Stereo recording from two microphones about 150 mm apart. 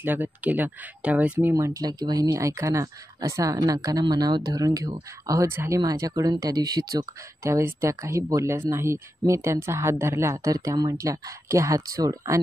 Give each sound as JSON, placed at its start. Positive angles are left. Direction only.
{"t": 0.0, "sound": "speech", "side_deg": -10}
{"t": 1.5, "sound": "speech", "side_deg": -20}